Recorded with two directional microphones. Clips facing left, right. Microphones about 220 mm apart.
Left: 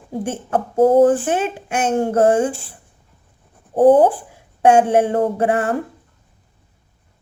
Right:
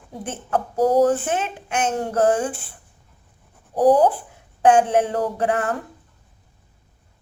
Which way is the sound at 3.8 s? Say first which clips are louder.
Left 4 dB; 25° left (ahead or behind).